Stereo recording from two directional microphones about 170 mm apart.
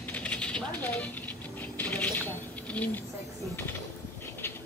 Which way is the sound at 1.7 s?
10° left (ahead or behind).